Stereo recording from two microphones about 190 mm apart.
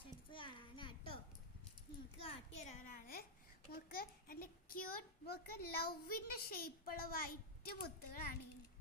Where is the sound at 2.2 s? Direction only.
35° left (ahead or behind); by 4.8 s 50° left (ahead or behind).